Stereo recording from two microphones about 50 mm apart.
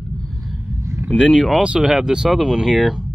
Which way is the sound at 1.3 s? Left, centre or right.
Centre.